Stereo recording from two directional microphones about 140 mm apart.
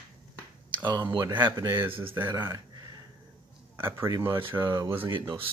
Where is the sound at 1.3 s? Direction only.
15° right (ahead or behind).